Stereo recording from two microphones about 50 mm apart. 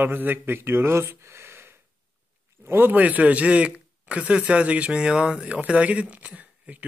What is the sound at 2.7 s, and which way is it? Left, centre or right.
Speech, right.